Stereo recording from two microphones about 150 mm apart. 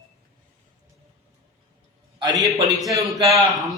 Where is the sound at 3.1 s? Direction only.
20° right (ahead or behind).